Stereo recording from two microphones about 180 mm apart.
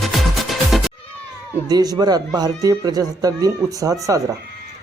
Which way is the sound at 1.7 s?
20° right (ahead or behind).